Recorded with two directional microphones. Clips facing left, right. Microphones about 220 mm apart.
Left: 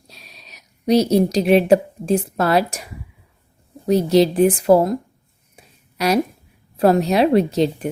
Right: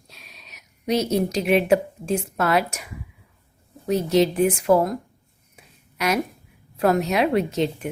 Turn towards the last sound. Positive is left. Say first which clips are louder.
# left 5 dB
turn(degrees=35)  # may be behind; listen again after turning